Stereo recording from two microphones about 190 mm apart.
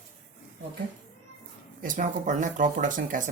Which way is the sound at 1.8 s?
45° right (ahead or behind).